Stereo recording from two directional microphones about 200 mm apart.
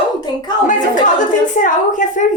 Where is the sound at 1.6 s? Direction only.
40° left (ahead or behind).